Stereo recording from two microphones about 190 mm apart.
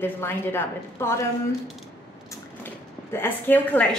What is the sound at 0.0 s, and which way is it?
A woman's voice, 10° left (ahead or behind).